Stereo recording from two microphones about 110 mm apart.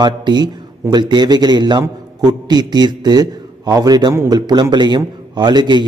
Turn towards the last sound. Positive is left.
turn(degrees=-40)  # may be behind; listen again after turning